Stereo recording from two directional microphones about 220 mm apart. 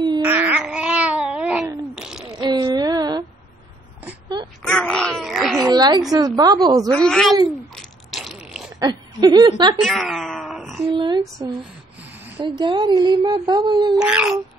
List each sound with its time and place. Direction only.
0.2 s babbling: 10° right (ahead or behind)
2.0 s a sound: 5° right (ahead or behind)
2.3 s female singing: 20° right (ahead or behind)
4.6 s a sound: 5° left (ahead or behind)
5.7 s a sound: 20° right (ahead or behind)
6.2 s a woman's voice: 20° right (ahead or behind)
6.9 s speech: 5° left (ahead or behind)
7.7 s mechanisms: centre (ahead or behind)
8.7 s speech: 20° right (ahead or behind)
9.8 s speech: centre (ahead or behind)
10.9 s speech: 20° right (ahead or behind)
12.4 s speech: 20° right (ahead or behind)
14.0 s speech: 5° right (ahead or behind)